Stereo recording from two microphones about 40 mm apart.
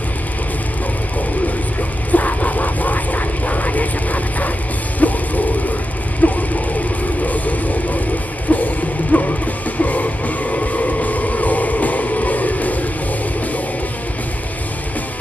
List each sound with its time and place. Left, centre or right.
2.0 s vehicle: left
5.0 s music: left
6.2 s a sound: left
7.2 s music: left